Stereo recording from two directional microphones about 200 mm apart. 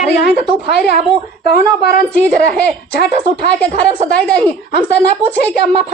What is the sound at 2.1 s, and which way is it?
Speech, 5° left (ahead or behind).